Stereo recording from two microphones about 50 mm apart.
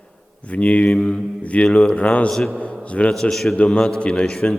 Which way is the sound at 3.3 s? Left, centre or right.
Centre.